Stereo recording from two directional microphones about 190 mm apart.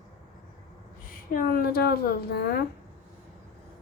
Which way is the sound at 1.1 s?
45° left (ahead or behind).